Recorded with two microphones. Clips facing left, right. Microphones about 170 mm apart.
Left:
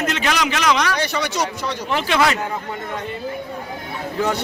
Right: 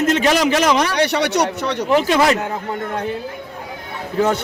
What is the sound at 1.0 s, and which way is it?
Speech, 65° right (ahead or behind).